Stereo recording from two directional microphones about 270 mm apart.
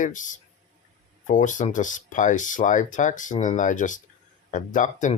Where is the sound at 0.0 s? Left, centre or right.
Left.